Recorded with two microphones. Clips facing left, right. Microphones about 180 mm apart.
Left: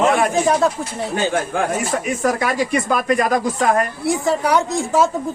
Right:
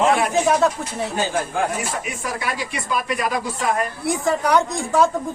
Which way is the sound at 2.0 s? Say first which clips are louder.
Left 8 dB; 45° left (ahead or behind).